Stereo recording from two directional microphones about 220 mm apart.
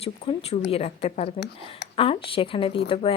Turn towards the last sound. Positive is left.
turn(degrees=25)  # may be behind; listen again after turning